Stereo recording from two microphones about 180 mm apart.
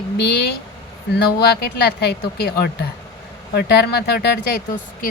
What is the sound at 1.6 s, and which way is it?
A woman's voice, 65° left (ahead or behind).